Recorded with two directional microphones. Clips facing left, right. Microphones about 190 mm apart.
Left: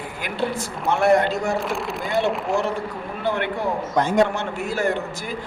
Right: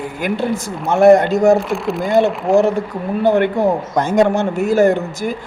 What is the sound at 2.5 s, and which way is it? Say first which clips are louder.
A man's voice: right 9 dB; 45° right (ahead or behind).